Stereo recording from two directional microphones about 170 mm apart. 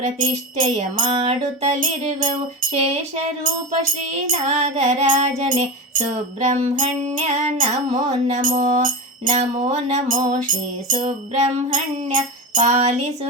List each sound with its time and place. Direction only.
0.0 s music: 45° right (ahead or behind)